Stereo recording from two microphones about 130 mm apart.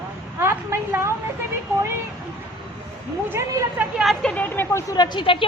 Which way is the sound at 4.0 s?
Centre (ahead or behind).